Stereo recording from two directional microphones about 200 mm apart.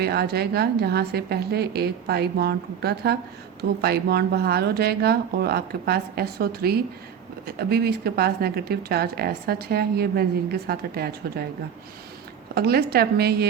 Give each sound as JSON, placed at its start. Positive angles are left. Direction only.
{"t": 0.0, "sound": "speech", "side_deg": -50}
{"t": 12.5, "sound": "speech", "side_deg": -50}